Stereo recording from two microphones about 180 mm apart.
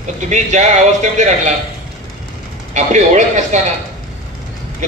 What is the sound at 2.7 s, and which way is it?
Speech, 40° right (ahead or behind).